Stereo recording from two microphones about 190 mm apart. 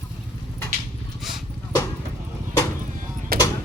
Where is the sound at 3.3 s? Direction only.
55° right (ahead or behind).